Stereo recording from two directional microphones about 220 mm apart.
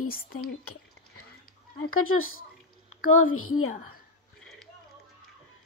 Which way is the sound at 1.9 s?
70° left (ahead or behind).